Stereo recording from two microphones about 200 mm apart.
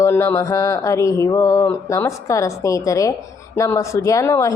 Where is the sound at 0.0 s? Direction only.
15° left (ahead or behind).